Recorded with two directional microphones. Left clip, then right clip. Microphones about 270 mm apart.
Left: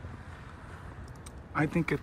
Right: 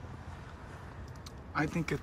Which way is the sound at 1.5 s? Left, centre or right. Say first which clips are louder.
Left 4 dB; centre.